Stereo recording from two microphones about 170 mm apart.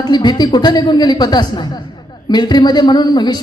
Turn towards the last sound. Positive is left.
turn(degrees=25)  # may be behind; listen again after turning